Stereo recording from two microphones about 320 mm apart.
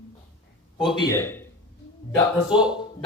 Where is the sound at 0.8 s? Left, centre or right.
Centre.